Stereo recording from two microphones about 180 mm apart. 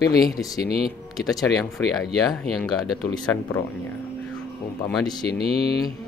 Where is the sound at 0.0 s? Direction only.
60° left (ahead or behind).